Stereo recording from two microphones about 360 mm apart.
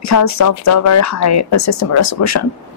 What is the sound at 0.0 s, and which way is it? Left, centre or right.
Speech, left.